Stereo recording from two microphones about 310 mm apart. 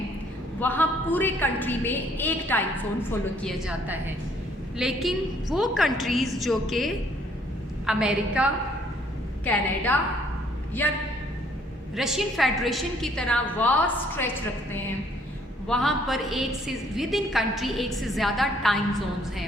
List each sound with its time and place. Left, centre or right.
0.6 s a man's voice: centre
11.9 s a woman's voice: centre
15.6 s a woman's voice: centre